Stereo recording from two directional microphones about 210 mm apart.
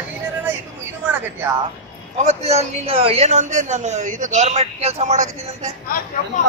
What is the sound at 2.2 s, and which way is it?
A man's voice, 30° right (ahead or behind).